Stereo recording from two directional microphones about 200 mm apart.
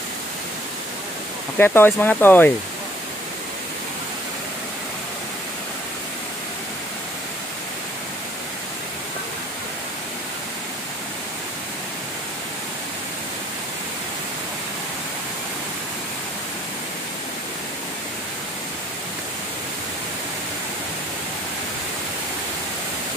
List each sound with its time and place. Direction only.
1.6 s speech: 10° left (ahead or behind)